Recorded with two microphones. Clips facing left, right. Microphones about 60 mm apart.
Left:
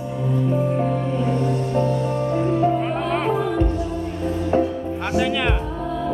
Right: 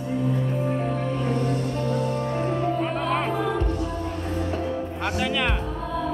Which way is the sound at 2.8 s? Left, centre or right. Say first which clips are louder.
Left 2 dB; centre.